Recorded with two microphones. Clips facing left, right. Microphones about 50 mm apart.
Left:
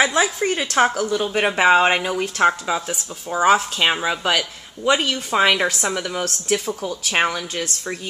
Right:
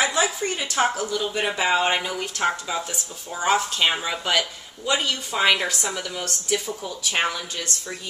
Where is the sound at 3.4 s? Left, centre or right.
Centre.